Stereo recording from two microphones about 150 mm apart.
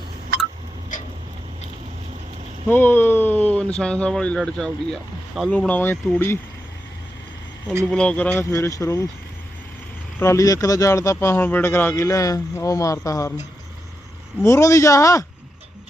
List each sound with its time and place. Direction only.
2.6 s speech: 15° left (ahead or behind)
7.9 s speech: 5° left (ahead or behind)
10.2 s speech: 20° left (ahead or behind)
14.4 s speech: 20° left (ahead or behind)